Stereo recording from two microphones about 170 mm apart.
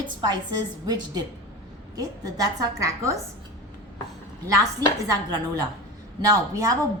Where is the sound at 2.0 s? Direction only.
20° right (ahead or behind).